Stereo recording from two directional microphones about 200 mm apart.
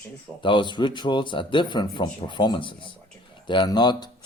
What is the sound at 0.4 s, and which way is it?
Speech, 25° left (ahead or behind).